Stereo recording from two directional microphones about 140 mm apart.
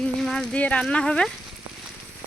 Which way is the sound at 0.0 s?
5° left (ahead or behind).